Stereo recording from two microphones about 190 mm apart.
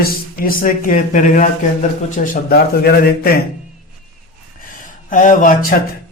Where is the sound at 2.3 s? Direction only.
55° left (ahead or behind).